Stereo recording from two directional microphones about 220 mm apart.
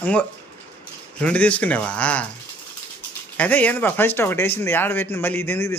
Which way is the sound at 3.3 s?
5° left (ahead or behind).